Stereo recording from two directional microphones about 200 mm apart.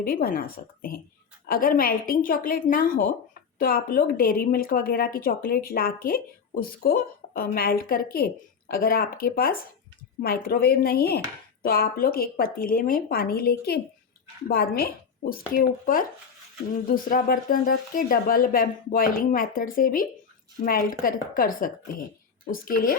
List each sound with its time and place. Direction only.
0.0 s a woman's voice: 45° left (ahead or behind)